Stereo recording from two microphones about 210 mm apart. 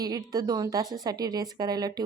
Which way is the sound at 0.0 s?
15° right (ahead or behind).